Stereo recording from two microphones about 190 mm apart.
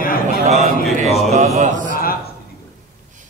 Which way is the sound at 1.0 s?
Centre (ahead or behind).